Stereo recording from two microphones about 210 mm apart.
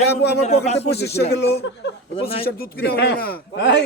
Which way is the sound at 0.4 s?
30° left (ahead or behind).